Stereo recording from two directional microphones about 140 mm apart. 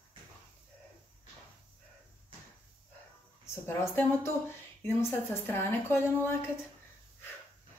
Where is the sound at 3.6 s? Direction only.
15° left (ahead or behind).